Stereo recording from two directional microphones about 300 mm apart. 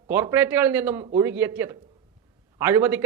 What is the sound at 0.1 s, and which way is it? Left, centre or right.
A man's voice, centre.